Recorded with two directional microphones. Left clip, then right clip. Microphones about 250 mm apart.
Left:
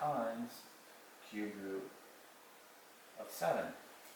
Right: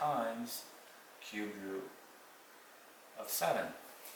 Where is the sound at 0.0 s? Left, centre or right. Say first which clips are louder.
Right 3 dB; centre.